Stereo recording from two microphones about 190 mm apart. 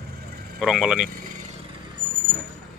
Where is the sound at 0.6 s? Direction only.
Centre (ahead or behind).